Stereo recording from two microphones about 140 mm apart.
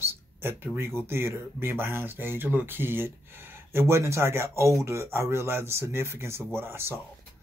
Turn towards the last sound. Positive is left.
turn(degrees=-15)  # may be behind; listen again after turning